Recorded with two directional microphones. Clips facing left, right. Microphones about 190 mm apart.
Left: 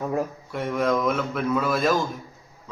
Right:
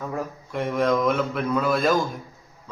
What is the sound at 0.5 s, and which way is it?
A man's voice, centre (ahead or behind).